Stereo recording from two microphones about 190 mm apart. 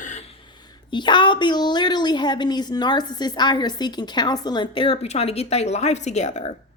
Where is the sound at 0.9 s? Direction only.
25° left (ahead or behind).